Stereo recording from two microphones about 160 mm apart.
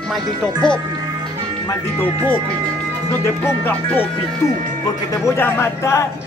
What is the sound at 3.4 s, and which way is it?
Speech, 15° left (ahead or behind).